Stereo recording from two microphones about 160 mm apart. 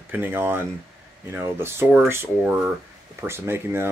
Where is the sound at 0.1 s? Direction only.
10° right (ahead or behind).